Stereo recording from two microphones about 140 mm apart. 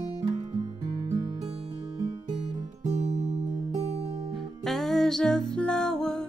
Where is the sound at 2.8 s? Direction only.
50° right (ahead or behind).